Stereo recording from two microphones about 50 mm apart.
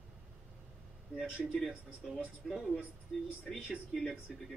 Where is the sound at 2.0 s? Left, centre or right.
Centre.